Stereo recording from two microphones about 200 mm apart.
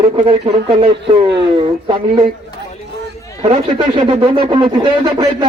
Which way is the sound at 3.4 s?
25° right (ahead or behind).